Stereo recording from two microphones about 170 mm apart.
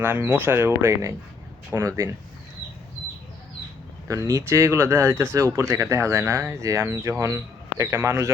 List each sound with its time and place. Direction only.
0.0 s speech: 10° right (ahead or behind)
4.1 s speech: 20° right (ahead or behind)